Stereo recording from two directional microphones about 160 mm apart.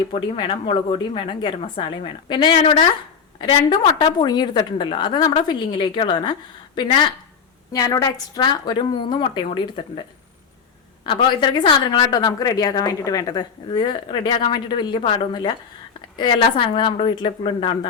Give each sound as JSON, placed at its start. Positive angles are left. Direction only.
{"t": 0.1, "sound": "a woman's voice", "side_deg": 30}
{"t": 11.0, "sound": "a woman's voice", "side_deg": 30}